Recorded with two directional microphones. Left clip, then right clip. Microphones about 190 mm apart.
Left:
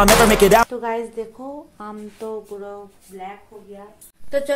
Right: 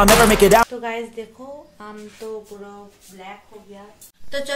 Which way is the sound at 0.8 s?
35° left (ahead or behind).